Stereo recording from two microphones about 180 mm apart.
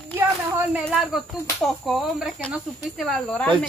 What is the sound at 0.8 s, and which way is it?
Speech, centre (ahead or behind).